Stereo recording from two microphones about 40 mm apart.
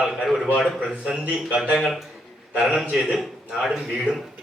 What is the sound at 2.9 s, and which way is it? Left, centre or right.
A man's voice, centre.